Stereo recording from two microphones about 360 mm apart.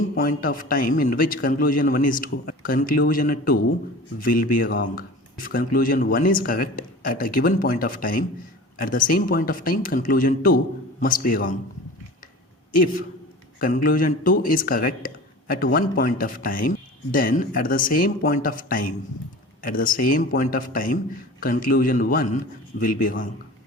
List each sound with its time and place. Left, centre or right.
0.2 s speech: left
12.7 s speech: left